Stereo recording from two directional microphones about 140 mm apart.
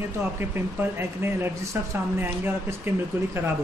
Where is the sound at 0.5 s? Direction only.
15° right (ahead or behind).